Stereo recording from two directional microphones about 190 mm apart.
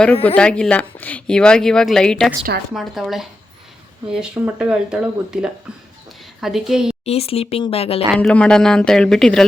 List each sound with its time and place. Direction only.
0.3 s a woman's voice: 5° left (ahead or behind)
7.0 s speech: 30° left (ahead or behind)
8.1 s a woman's voice: 5° left (ahead or behind)